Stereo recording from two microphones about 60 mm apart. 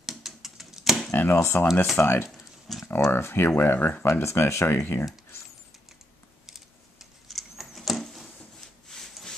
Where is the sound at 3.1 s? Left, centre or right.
Left.